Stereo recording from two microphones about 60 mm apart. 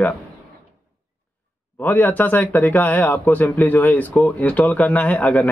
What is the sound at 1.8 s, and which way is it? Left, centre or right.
A man's voice, left.